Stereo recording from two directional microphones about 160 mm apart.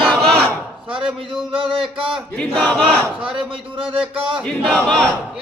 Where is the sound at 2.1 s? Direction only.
5° left (ahead or behind).